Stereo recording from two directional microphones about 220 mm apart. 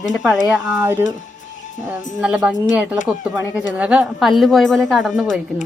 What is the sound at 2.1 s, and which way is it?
A woman's voice, centre (ahead or behind).